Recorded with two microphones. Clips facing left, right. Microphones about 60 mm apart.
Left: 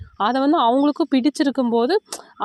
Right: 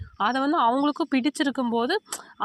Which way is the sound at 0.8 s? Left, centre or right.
Left.